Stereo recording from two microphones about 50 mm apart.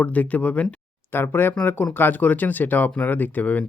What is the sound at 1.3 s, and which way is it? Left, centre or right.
Speech, left.